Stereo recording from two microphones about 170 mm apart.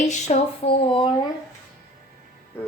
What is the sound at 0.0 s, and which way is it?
Speech, 45° left (ahead or behind).